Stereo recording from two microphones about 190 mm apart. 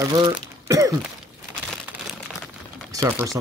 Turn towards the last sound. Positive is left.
turn(degrees=-15)  # may be behind; listen again after turning